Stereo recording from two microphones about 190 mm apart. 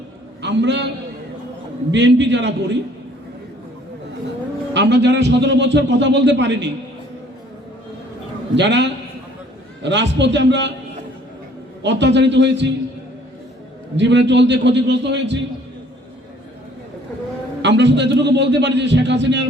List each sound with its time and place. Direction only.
0.4 s a man's voice: 70° right (ahead or behind)
1.9 s a man's voice: 70° right (ahead or behind)
4.7 s a man's voice: 70° right (ahead or behind)
8.5 s a man's voice: 70° right (ahead or behind)
11.8 s a man's voice: 65° right (ahead or behind)
13.9 s a man's voice: 70° right (ahead or behind)
17.6 s a man's voice: 65° right (ahead or behind)